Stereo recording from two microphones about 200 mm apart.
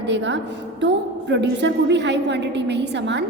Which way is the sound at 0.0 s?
60° right (ahead or behind).